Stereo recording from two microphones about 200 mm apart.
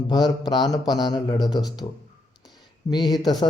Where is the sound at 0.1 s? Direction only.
20° left (ahead or behind).